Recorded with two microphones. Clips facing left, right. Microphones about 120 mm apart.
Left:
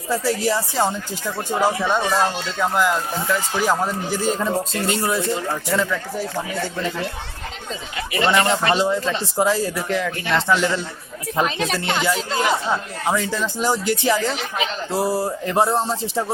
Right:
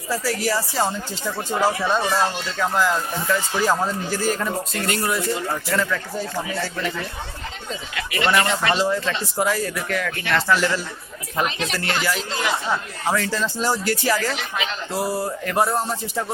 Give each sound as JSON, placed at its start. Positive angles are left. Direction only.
{"t": 0.1, "sound": "speech", "side_deg": 25}
{"t": 6.8, "sound": "speech", "side_deg": 25}
{"t": 8.1, "sound": "speech", "side_deg": 25}
{"t": 12.3, "sound": "speech", "side_deg": 45}
{"t": 12.7, "sound": "speech", "side_deg": 20}